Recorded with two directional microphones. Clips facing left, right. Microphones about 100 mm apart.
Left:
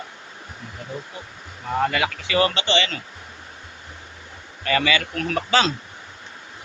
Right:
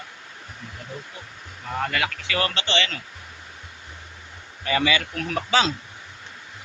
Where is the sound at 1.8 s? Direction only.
10° left (ahead or behind).